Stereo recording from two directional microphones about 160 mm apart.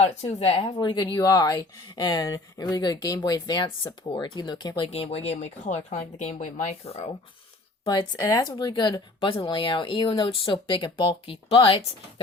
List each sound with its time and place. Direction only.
0.0 s speech: 40° left (ahead or behind)
4.9 s speech: 40° left (ahead or behind)
7.9 s speech: 25° left (ahead or behind)